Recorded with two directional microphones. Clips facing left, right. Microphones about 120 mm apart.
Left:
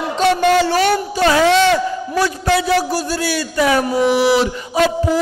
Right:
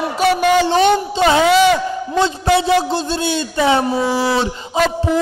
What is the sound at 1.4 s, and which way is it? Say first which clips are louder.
Speech: even; 5° right (ahead or behind).